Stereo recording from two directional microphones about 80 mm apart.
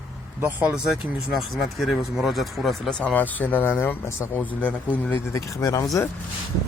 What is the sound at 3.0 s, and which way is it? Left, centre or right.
Speech, centre.